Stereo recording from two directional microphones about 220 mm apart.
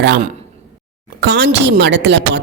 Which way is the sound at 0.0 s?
50° right (ahead or behind).